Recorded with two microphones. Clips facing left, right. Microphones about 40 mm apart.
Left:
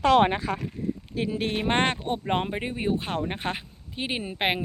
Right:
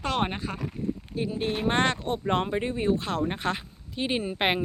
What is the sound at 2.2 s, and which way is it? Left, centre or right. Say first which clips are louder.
Speech: right 3 dB; centre.